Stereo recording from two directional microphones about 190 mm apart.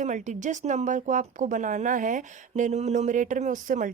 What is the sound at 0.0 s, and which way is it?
A woman's voice, 40° right (ahead or behind).